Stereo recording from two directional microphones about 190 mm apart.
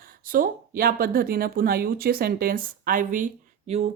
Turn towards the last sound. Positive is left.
turn(degrees=-35)  # may be behind; listen again after turning